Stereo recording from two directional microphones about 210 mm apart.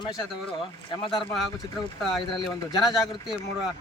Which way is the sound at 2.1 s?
Centre (ahead or behind).